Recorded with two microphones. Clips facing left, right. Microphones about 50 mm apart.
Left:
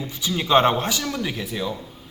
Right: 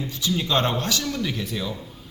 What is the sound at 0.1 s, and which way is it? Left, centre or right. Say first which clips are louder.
A man's voice: left 6 dB; left.